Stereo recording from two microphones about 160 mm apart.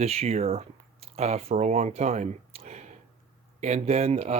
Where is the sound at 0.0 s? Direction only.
40° right (ahead or behind).